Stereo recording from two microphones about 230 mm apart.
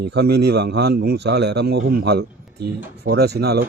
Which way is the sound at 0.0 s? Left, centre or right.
Right.